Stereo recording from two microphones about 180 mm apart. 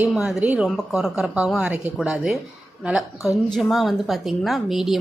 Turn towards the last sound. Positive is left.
turn(degrees=0)  # may be behind; listen again after turning